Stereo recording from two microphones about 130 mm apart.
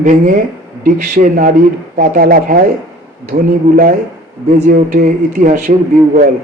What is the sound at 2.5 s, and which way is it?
Speech, 85° right.